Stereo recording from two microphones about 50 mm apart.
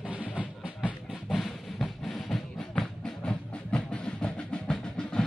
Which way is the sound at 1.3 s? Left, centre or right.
Centre.